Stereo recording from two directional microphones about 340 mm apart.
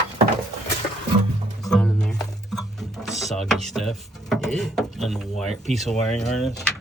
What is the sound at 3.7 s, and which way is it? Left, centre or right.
Speech, centre.